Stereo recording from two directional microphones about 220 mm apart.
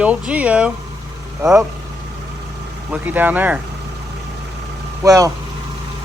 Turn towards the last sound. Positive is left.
turn(degrees=-15)  # may be behind; listen again after turning